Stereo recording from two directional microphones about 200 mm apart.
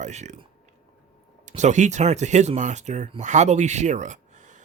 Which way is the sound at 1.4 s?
35° right (ahead or behind).